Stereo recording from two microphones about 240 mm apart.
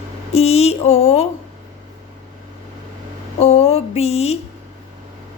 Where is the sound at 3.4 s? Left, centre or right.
Left.